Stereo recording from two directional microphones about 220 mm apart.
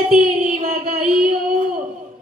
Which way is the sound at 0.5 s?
30° right (ahead or behind).